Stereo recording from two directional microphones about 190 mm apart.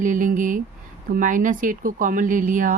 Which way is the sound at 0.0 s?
45° right (ahead or behind).